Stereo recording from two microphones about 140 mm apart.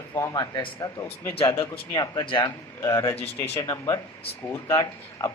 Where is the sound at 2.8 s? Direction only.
20° left (ahead or behind).